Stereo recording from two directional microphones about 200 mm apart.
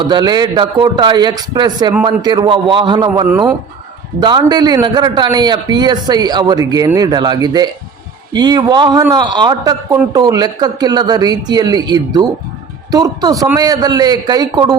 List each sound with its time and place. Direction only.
0.0 s a man's voice: 20° right (ahead or behind)
3.2 s speech: 10° right (ahead or behind)
4.2 s a man's voice: 20° right (ahead or behind)